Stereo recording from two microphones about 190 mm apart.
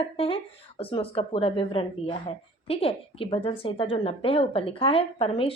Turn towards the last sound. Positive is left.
turn(degrees=30)  # may be behind; listen again after turning